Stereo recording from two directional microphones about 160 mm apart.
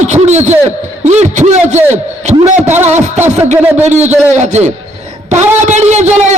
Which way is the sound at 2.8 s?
45° right (ahead or behind).